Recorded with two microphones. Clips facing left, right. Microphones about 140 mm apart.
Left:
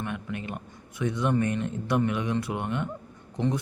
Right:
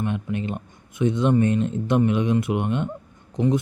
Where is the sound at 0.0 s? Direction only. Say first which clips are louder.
Right 7 dB; 20° right (ahead or behind).